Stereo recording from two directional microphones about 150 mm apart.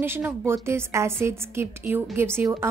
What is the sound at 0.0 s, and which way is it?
A woman's voice, 15° right (ahead or behind).